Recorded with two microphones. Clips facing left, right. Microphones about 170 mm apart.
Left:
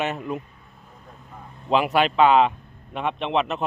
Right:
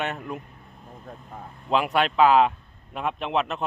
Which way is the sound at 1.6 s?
Centre (ahead or behind).